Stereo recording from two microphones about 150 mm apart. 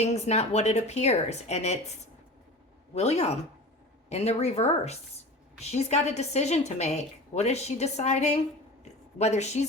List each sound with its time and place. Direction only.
0.0 s a woman's voice: 50° left (ahead or behind)